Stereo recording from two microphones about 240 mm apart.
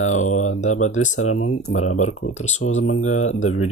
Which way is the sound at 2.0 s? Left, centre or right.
Left.